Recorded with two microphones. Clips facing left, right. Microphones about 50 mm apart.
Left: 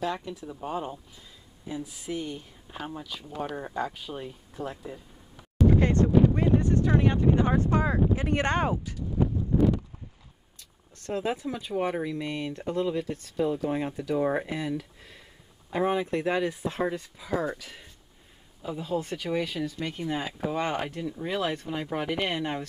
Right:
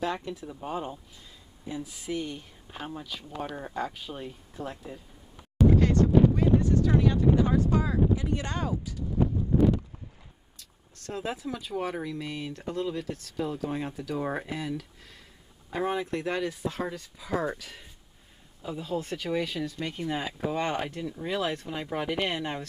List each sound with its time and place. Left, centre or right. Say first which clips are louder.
0.0 s speech: even; centre
5.8 s speech: left 1 dB; left
8.3 s speech: left 5 dB; left
11.2 s speech: left 3 dB; centre
17.6 s speech: even; centre